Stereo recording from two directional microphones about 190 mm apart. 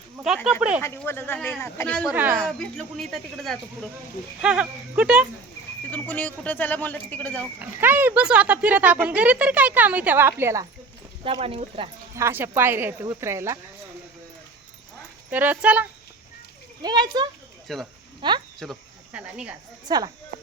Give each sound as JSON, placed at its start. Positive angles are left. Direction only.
{"t": 0.5, "sound": "speech", "side_deg": -5}
{"t": 0.8, "sound": "speech", "side_deg": 15}
{"t": 2.0, "sound": "speech", "side_deg": -10}
{"t": 2.5, "sound": "speech", "side_deg": 0}
{"t": 5.9, "sound": "speech", "side_deg": 10}
{"t": 7.6, "sound": "speech", "side_deg": -10}
{"t": 11.2, "sound": "speech", "side_deg": -30}
{"t": 12.1, "sound": "speech", "side_deg": -10}
{"t": 15.3, "sound": "speech", "side_deg": -10}
{"t": 16.8, "sound": "speech", "side_deg": -20}
{"t": 17.7, "sound": "speech", "side_deg": 0}
{"t": 18.2, "sound": "speech", "side_deg": -25}
{"t": 18.6, "sound": "speech", "side_deg": 0}
{"t": 19.9, "sound": "speech", "side_deg": -20}